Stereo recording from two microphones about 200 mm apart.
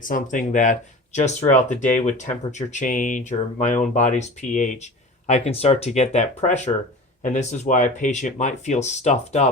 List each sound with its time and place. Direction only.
0.0 s speech: 40° left (ahead or behind)